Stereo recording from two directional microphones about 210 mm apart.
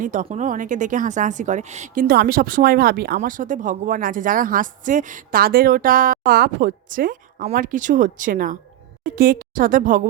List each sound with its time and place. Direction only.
0.0 s a woman's voice: 35° right (ahead or behind)